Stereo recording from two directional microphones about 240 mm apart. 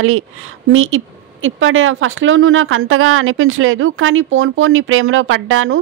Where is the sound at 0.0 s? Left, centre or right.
Right.